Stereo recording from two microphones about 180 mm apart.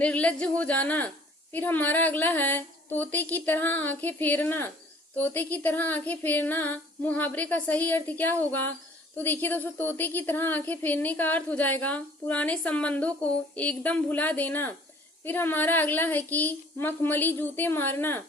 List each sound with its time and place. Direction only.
0.0 s a woman's voice: 5° left (ahead or behind)